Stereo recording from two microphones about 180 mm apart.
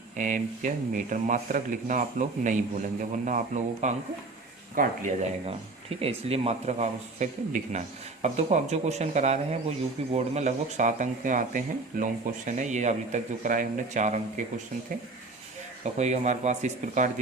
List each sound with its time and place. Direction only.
0.2 s speech: 45° right (ahead or behind)
15.8 s speech: 40° right (ahead or behind)